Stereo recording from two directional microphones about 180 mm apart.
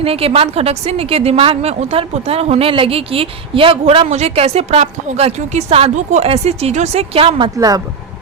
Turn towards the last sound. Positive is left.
turn(degrees=-20)  # may be behind; listen again after turning